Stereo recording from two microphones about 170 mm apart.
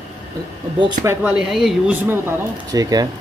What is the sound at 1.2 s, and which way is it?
Speech, 5° right (ahead or behind).